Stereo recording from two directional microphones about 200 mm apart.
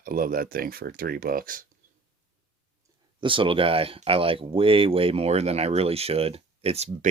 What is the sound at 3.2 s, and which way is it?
Speech, 25° right (ahead or behind).